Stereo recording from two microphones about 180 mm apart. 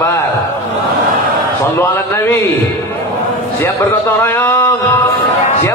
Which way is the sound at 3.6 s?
10° left (ahead or behind).